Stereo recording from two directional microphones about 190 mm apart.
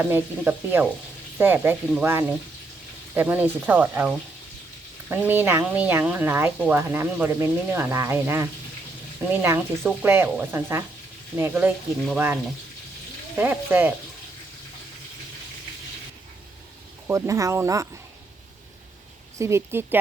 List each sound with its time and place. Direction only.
0.0 s speech: 10° right (ahead or behind)
17.1 s speech: 15° right (ahead or behind)
19.4 s speech: 15° right (ahead or behind)